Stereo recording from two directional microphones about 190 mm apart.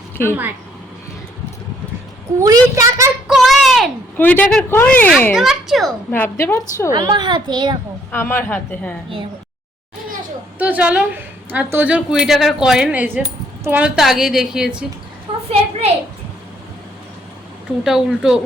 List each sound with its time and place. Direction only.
2.4 s a woman's voice: 15° right (ahead or behind)
3.2 s a sound: centre (ahead or behind)
4.2 s speech: 10° left (ahead or behind)
6.1 s a woman's voice: 10° left (ahead or behind)
6.9 s a child's voice: 20° right (ahead or behind)
8.1 s a woman's voice: 10° left (ahead or behind)
10.6 s a woman's voice: 10° right (ahead or behind)
15.3 s a sound: 30° right (ahead or behind)
17.8 s speech: centre (ahead or behind)